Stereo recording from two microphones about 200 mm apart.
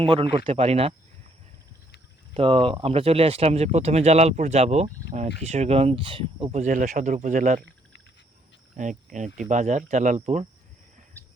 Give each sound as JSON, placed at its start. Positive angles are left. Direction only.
{"t": 0.0, "sound": "speech", "side_deg": -30}
{"t": 2.3, "sound": "speech", "side_deg": -30}
{"t": 8.7, "sound": "speech", "side_deg": -40}